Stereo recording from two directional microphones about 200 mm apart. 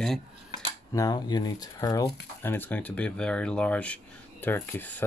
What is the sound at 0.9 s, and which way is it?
Speech, 20° left (ahead or behind).